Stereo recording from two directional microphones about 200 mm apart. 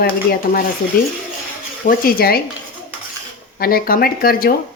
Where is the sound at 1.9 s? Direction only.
50° left (ahead or behind).